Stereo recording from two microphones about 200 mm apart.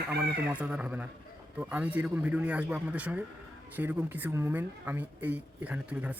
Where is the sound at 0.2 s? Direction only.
5° right (ahead or behind).